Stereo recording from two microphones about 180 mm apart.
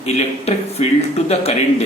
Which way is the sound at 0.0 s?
35° left (ahead or behind).